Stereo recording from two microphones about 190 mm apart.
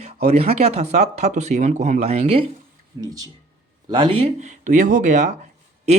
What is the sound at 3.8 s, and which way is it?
Speech, 25° right (ahead or behind).